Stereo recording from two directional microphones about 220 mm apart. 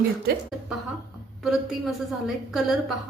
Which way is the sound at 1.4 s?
Centre (ahead or behind).